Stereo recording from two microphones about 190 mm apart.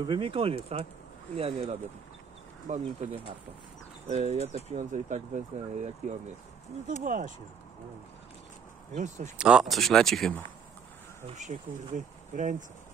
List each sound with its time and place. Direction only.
0.0 s speech: 25° right (ahead or behind); by 7.3 s 45° right (ahead or behind)
8.9 s speech: 40° right (ahead or behind)
9.4 s speech: 5° right (ahead or behind)
11.2 s speech: 40° right (ahead or behind)